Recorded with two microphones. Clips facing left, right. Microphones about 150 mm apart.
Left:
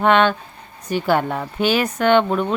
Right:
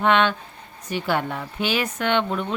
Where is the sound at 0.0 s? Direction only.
45° left (ahead or behind).